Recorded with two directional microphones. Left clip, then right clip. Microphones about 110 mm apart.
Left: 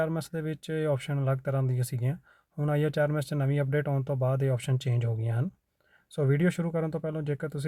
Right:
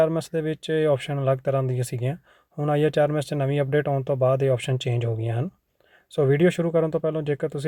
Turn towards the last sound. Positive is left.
turn(degrees=-15)  # may be behind; listen again after turning